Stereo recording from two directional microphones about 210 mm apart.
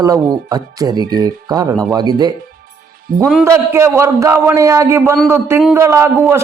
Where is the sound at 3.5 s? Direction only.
10° right (ahead or behind).